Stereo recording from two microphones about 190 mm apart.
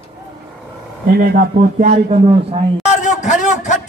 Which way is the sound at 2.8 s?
40° left (ahead or behind).